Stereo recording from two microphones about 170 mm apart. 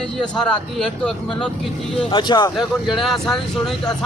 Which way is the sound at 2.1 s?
25° left (ahead or behind).